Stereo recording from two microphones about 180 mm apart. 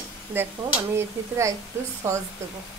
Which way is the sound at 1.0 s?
15° right (ahead or behind).